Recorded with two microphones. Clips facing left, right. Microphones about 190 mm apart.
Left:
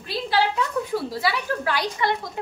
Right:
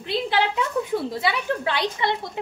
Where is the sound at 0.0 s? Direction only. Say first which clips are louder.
Even; 20° right (ahead or behind).